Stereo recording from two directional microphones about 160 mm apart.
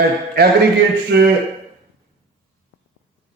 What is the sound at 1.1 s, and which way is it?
Speech, 90° right.